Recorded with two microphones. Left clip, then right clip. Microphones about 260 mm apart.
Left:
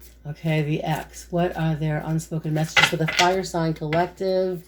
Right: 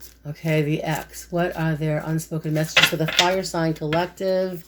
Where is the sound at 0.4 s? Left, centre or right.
Right.